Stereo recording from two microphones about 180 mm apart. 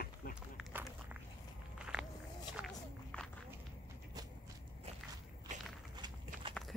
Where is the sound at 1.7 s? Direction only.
5° right (ahead or behind).